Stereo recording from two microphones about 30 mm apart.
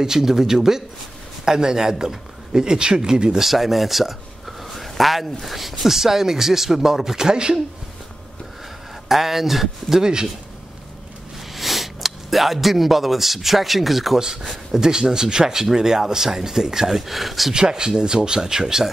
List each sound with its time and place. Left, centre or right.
0.0 s speech: centre
3.3 s speech: centre
7.2 s speech: right
9.1 s speech: centre
11.5 s speech: centre
14.1 s speech: centre
14.8 s speech: right; by 17.5 s centre
17.5 s speech: right